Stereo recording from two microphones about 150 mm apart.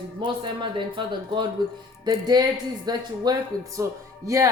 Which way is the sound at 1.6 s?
30° right (ahead or behind).